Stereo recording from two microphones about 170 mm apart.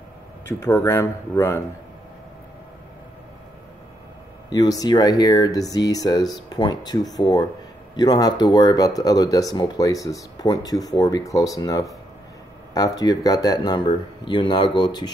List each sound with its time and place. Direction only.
0.5 s speech: 15° left (ahead or behind)
4.5 s speech: 20° left (ahead or behind)